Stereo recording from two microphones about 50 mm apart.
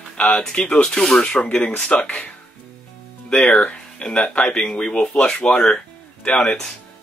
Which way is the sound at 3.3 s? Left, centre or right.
Left.